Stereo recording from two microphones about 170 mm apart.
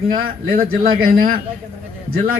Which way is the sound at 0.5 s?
60° right (ahead or behind).